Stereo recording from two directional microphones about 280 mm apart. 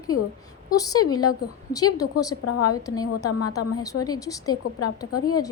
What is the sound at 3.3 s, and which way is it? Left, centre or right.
Speech, left.